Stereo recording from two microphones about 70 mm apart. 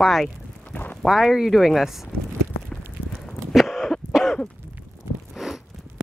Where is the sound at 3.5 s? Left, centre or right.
Centre.